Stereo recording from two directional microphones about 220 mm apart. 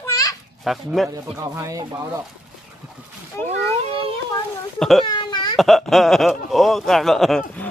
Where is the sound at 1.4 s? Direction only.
15° right (ahead or behind).